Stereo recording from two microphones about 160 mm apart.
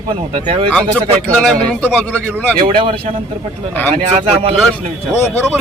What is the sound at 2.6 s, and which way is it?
Speech, 30° right (ahead or behind).